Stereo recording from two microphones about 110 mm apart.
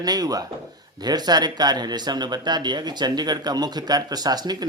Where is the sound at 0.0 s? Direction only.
35° right (ahead or behind).